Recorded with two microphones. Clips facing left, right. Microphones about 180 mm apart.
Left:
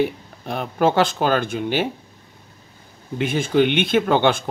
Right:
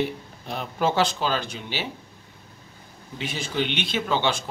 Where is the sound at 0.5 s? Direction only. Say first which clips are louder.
Left 6 dB; 55° left (ahead or behind).